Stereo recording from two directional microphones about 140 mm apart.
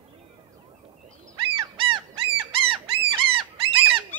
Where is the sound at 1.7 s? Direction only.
40° right (ahead or behind).